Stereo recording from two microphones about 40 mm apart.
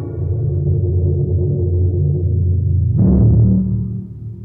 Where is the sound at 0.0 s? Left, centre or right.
Centre.